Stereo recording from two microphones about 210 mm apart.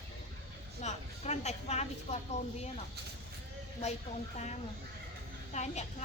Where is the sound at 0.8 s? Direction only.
35° left (ahead or behind).